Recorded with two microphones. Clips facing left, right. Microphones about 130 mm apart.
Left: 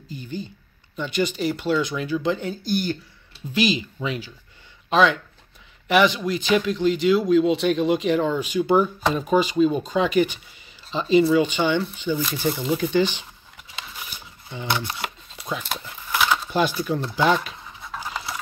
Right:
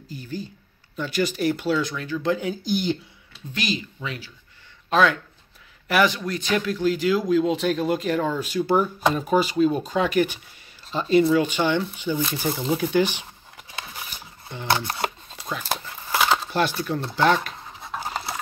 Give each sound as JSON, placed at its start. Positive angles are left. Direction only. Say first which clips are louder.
{"t": 0.1, "sound": "speech", "louder": "left 1 dB", "side_deg": -5}
{"t": 2.0, "sound": "speech", "louder": "left 4 dB", "side_deg": 15}
{"t": 2.2, "sound": "speech", "louder": "even", "side_deg": -5}
{"t": 2.6, "sound": "speech", "louder": "right 1 dB", "side_deg": -20}
{"t": 3.5, "sound": "speech", "louder": "left 6 dB", "side_deg": 15}
{"t": 4.8, "sound": "speech", "louder": "left 1 dB", "side_deg": 0}
{"t": 15.6, "sound": "a sound", "louder": "right 3 dB", "side_deg": -30}
{"t": 16.5, "sound": "speech", "louder": "left 2 dB", "side_deg": 5}
{"t": 18.0, "sound": "pant", "louder": "right 1 dB", "side_deg": -35}